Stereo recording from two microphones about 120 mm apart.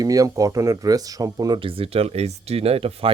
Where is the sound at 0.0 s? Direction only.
30° right (ahead or behind).